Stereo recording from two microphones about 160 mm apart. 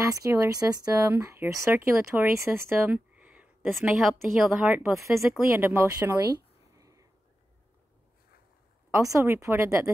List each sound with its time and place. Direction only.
0.0 s speech: 20° right (ahead or behind)
5.0 s speech: 15° right (ahead or behind)
5.5 s a sound: 15° right (ahead or behind)
8.9 s speech: 20° right (ahead or behind)